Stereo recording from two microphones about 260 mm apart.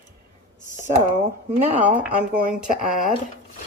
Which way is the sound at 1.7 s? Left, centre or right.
Centre.